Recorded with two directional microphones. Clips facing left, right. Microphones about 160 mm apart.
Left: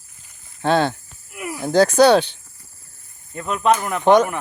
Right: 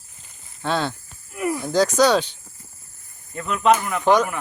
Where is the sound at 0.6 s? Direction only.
55° left (ahead or behind).